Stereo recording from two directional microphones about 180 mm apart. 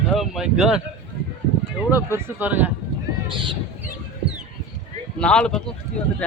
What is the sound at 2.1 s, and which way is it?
Speech, 10° right (ahead or behind).